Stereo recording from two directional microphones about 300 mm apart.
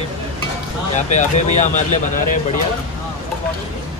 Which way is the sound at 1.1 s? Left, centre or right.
Left.